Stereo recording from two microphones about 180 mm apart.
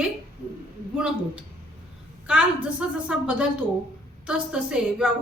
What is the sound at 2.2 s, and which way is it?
A woman's voice, 5° right (ahead or behind).